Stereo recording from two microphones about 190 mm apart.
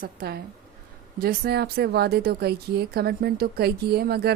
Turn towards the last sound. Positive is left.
turn(degrees=-55)  # may be behind; listen again after turning